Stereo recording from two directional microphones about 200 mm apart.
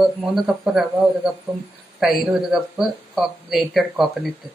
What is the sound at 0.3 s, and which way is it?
Speech, centre (ahead or behind).